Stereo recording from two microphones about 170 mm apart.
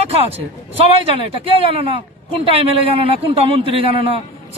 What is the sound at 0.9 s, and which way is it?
A man's voice, 30° right (ahead or behind).